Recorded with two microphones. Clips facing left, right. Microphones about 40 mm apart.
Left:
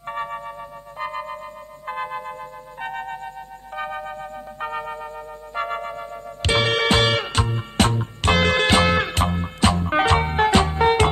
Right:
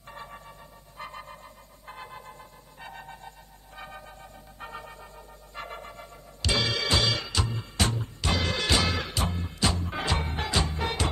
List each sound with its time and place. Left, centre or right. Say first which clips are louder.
0.0 s music: left 14 dB; left
0.5 s music: left 13 dB; left
5.9 s music: left 13 dB; left